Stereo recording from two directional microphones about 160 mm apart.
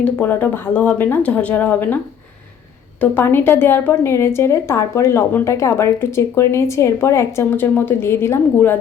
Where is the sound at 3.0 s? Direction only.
15° left (ahead or behind).